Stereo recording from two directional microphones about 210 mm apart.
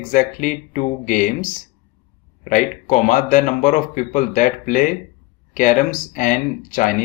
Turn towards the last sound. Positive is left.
turn(degrees=40)  # may be behind; listen again after turning